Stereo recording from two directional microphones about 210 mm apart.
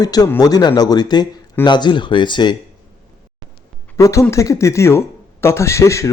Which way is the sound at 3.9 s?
15° left (ahead or behind).